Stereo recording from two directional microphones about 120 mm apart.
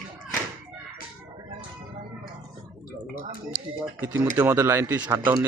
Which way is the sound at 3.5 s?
10° right (ahead or behind).